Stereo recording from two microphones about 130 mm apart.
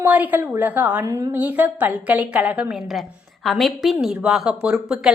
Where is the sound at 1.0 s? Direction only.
25° right (ahead or behind).